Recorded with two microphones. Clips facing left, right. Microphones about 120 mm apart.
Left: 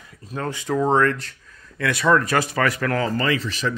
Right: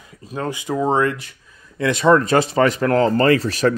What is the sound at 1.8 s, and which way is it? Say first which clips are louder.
Speech: right 4 dB; 25° right (ahead or behind).